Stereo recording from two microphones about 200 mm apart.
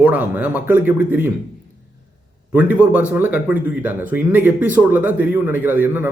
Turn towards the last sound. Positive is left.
turn(degrees=-10)  # may be behind; listen again after turning